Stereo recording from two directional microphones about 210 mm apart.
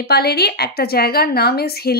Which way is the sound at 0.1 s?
50° left (ahead or behind).